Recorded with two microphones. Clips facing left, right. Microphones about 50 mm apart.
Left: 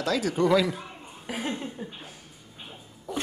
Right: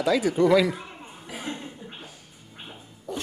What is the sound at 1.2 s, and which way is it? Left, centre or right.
Chuckle, left.